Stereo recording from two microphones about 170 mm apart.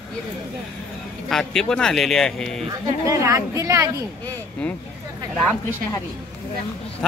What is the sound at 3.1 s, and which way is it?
Speech, 20° right (ahead or behind).